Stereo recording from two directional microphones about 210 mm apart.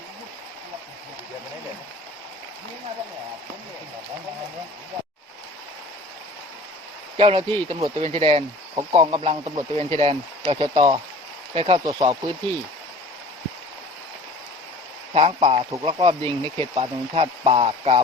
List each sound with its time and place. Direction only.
7.2 s speech: 25° right (ahead or behind)
15.1 s speech: 25° right (ahead or behind)